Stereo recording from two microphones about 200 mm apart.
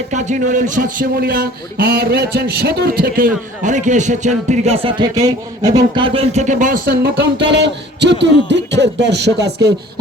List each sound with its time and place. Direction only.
0.1 s a man's voice: 35° right (ahead or behind); by 9.7 s 55° right (ahead or behind)